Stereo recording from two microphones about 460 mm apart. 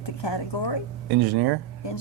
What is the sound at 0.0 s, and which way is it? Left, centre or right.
Speech, left.